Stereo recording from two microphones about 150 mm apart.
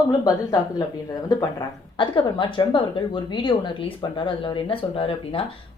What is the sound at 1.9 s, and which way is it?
A woman's voice, 30° left (ahead or behind).